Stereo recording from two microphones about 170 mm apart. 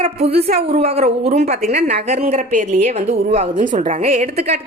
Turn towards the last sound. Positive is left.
turn(degrees=-40)  # may be behind; listen again after turning